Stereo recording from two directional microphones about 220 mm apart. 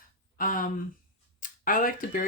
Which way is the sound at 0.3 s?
40° left (ahead or behind).